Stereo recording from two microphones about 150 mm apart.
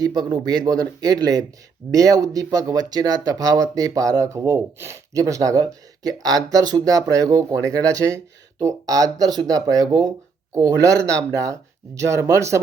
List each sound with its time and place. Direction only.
0.0 s speech: 25° right (ahead or behind)